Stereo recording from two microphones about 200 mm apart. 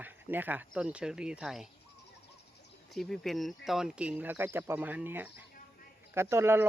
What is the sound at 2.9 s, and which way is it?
Speech, centre (ahead or behind).